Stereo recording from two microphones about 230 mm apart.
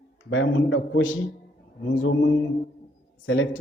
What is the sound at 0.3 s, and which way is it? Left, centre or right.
A man's voice, left.